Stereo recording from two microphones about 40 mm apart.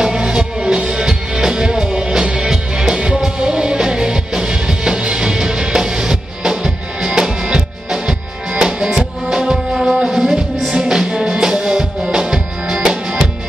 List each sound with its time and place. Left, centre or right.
0.0 s music: centre
9.7 s music: centre